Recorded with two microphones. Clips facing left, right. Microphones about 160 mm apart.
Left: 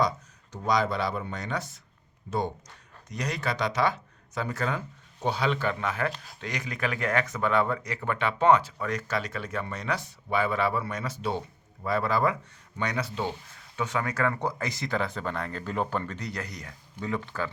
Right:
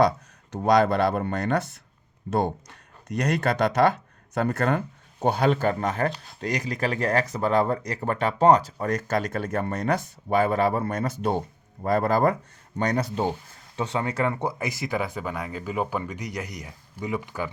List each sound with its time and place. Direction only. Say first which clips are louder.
0.5 s speech: right 7 dB; 60° right (ahead or behind); by 13.3 s 45° right (ahead or behind)
13.7 s speech: right 3 dB; 30° right (ahead or behind); by 17.5 s 15° right (ahead or behind)